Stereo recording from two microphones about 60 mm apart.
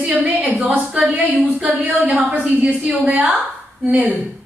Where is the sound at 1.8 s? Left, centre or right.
Right.